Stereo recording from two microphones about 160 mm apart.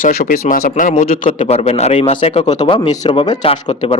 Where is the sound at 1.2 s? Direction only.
35° left (ahead or behind).